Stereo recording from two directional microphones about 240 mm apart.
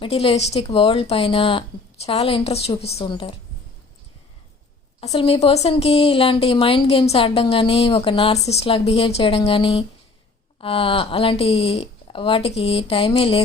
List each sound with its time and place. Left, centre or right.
0.0 s speech: left
4.9 s speech: left